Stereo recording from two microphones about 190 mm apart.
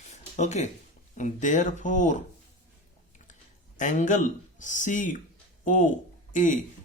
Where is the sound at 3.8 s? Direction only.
40° left (ahead or behind).